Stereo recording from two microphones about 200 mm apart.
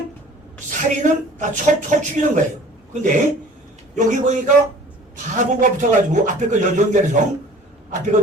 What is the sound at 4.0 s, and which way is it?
A man's voice, 35° right (ahead or behind).